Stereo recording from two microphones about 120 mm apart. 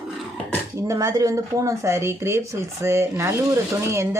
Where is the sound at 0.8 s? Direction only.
25° right (ahead or behind).